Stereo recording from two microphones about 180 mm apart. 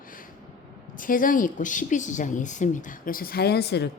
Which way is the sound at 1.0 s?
50° left (ahead or behind).